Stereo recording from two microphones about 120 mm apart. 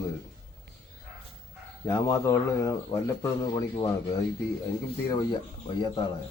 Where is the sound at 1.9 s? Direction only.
20° left (ahead or behind).